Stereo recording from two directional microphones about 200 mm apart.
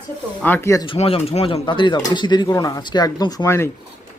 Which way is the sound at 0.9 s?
30° left (ahead or behind).